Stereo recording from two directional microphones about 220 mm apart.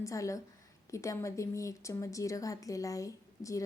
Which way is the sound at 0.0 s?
15° left (ahead or behind).